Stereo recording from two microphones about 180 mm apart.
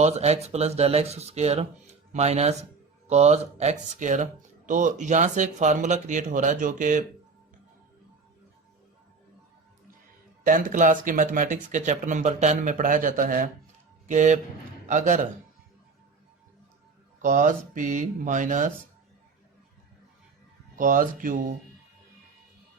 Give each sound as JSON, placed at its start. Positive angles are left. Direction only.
{"t": 0.0, "sound": "speech", "side_deg": -35}
{"t": 10.4, "sound": "a man's voice", "side_deg": -50}
{"t": 17.2, "sound": "speech", "side_deg": -45}
{"t": 20.7, "sound": "speech", "side_deg": -50}